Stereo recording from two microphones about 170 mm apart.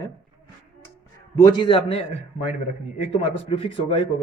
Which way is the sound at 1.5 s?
30° left (ahead or behind).